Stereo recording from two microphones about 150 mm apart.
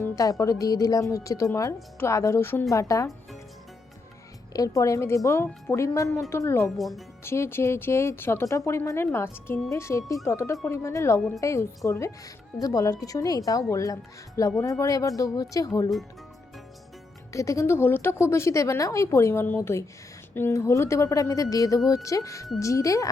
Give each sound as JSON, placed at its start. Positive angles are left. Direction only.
{"t": 0.0, "sound": "speech", "side_deg": 20}
{"t": 4.5, "sound": "a woman's voice", "side_deg": 25}
{"t": 6.7, "sound": "speech", "side_deg": 0}
{"t": 7.3, "sound": "a woman's voice", "side_deg": 15}
{"t": 17.3, "sound": "a woman's voice", "side_deg": 20}